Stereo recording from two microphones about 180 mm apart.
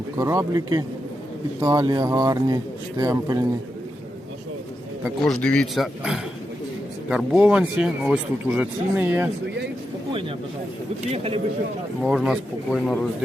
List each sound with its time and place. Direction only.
0.2 s speech: 20° right (ahead or behind)
5.2 s speech: 5° left (ahead or behind); by 9.3 s 10° right (ahead or behind)
11.1 s speech: 35° right (ahead or behind)
12.0 s speech: 5° right (ahead or behind)